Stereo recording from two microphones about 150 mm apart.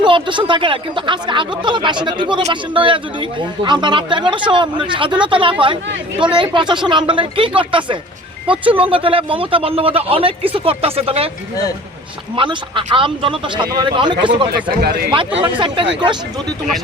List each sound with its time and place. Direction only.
0.0 s speech: 35° right (ahead or behind)
12.4 s speech: 35° right (ahead or behind)
14.5 s speech: 90° right
15.1 s speech: 35° right (ahead or behind)